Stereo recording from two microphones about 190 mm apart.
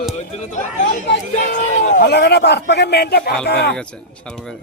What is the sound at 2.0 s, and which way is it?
Speech, 60° left (ahead or behind).